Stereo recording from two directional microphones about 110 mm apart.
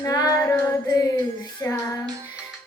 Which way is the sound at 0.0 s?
35° left (ahead or behind).